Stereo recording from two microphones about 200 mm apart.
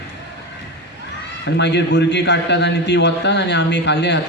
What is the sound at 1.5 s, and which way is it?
Speech, 60° left (ahead or behind).